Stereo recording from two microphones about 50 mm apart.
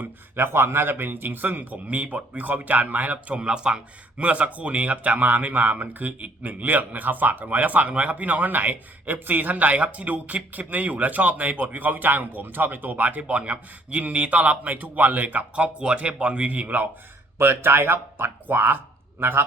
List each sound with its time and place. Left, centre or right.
0.3 s speech: right
3.4 s speech: centre
17.3 s speech: right